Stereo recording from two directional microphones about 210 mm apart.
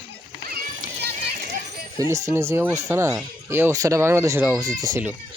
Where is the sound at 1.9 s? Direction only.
15° right (ahead or behind).